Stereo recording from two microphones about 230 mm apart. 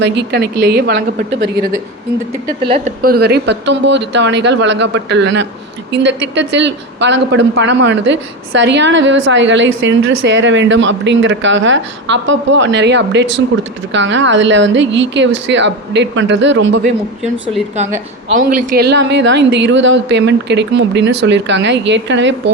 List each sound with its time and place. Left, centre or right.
0.0 s speech: right
2.6 s speech: right
18.3 s a woman's voice: right